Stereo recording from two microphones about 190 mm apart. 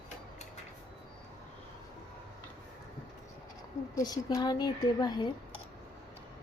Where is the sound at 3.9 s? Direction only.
20° left (ahead or behind).